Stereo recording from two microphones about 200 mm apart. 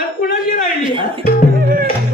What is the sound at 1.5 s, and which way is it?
Music, 50° right (ahead or behind).